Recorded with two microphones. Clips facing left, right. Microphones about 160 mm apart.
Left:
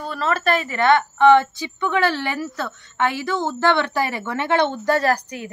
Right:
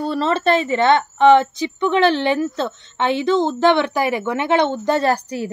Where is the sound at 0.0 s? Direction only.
30° right (ahead or behind).